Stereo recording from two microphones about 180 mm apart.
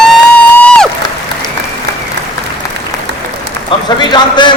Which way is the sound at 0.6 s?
5° left (ahead or behind).